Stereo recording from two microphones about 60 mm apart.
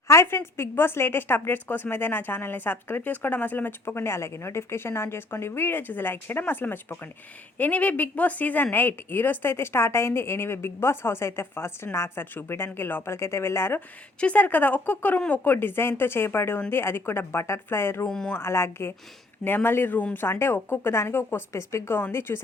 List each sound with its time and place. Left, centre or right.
0.1 s a woman's voice: left
14.2 s speech: left
15.5 s a woman's voice: left
18.1 s speech: centre
18.3 s a woman's voice: left
21.9 s a woman's voice: left